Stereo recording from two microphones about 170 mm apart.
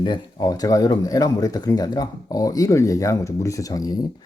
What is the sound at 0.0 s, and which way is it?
Speech, 25° left (ahead or behind).